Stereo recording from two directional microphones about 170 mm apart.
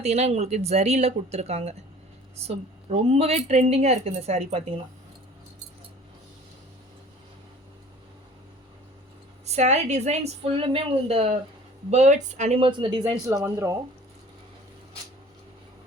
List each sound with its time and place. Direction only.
0.0 s a woman's voice: 40° right (ahead or behind)
9.5 s a woman's voice: 40° right (ahead or behind)
13.1 s speech: 15° right (ahead or behind)